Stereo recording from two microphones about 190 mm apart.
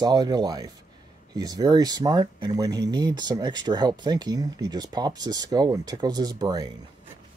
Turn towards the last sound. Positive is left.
turn(degrees=-20)  # may be behind; listen again after turning